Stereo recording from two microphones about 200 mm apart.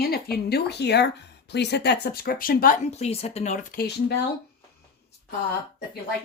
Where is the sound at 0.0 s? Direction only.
50° left (ahead or behind).